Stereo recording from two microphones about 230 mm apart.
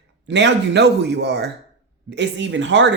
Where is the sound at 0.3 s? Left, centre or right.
Right.